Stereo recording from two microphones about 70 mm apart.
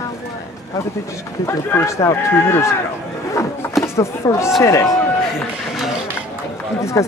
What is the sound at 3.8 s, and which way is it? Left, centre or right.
Speech, left.